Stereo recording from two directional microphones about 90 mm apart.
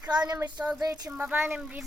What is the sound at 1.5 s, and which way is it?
Speech, 5° right (ahead or behind).